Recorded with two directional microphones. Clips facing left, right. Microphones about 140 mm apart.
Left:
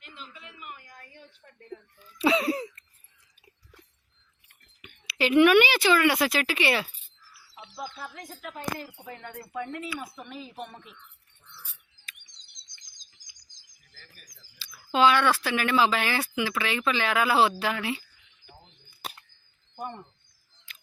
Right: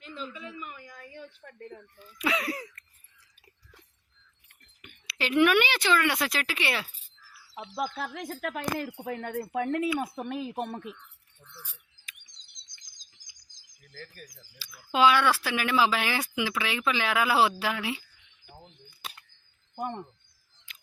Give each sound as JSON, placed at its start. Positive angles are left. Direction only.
{"t": 1.4, "sound": "speech", "side_deg": -75}
{"t": 2.1, "sound": "throat clearing", "side_deg": 30}
{"t": 4.8, "sound": "a woman's voice", "side_deg": 5}
{"t": 7.6, "sound": "a woman's voice", "side_deg": -85}
{"t": 14.6, "sound": "speech", "side_deg": -10}
{"t": 19.7, "sound": "speech", "side_deg": -60}